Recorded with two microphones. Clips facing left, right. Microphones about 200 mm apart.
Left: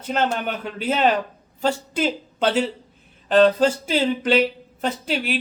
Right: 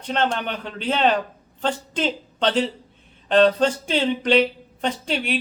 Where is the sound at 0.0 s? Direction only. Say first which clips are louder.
Left 1 dB; 5° left (ahead or behind).